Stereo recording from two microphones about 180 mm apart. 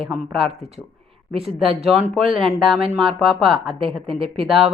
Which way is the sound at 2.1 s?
30° right (ahead or behind).